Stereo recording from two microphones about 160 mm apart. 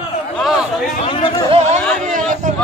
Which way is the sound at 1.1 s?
30° left (ahead or behind).